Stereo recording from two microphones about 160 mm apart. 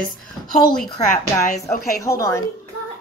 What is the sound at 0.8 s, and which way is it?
Speech, 45° left (ahead or behind).